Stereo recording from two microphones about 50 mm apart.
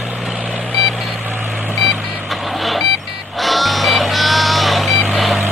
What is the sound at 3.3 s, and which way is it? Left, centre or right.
Music, centre.